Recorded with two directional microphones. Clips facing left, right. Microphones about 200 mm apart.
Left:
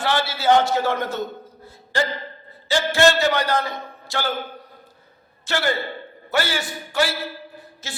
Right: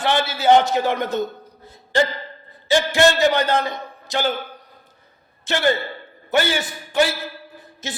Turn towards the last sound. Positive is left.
turn(degrees=-20)  # may be behind; listen again after turning